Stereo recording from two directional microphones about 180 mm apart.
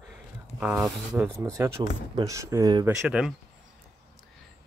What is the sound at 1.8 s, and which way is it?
Speech, 20° right (ahead or behind).